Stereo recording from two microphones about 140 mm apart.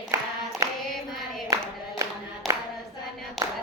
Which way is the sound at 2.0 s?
25° right (ahead or behind).